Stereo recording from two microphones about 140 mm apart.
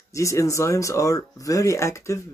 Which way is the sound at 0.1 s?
20° left (ahead or behind).